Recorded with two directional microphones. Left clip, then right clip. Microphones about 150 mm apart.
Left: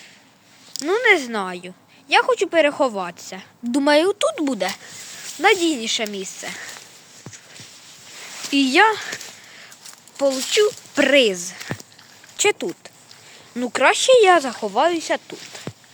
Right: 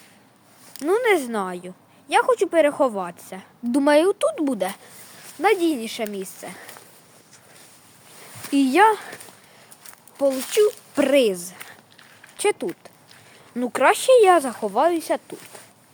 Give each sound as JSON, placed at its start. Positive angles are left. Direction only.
{"t": 0.9, "sound": "speech", "side_deg": -15}
{"t": 8.4, "sound": "a sound", "side_deg": -15}
{"t": 10.2, "sound": "speech", "side_deg": 10}
{"t": 11.1, "sound": "speech", "side_deg": -10}